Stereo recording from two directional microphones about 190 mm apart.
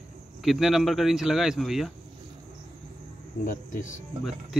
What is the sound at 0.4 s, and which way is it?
Speech, centre (ahead or behind).